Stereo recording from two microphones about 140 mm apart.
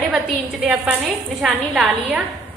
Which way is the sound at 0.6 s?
10° right (ahead or behind).